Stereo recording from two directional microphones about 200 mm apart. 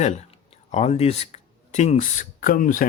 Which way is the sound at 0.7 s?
35° left (ahead or behind).